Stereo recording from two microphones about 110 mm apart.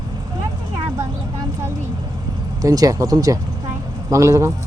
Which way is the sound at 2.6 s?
35° right (ahead or behind).